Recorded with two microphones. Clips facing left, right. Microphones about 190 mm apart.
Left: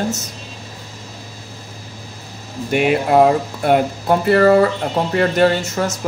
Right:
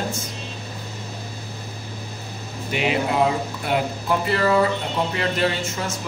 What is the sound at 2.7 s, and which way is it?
Speech, 50° left (ahead or behind).